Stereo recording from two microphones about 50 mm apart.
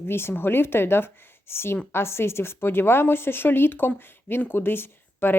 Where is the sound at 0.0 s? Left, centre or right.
Left.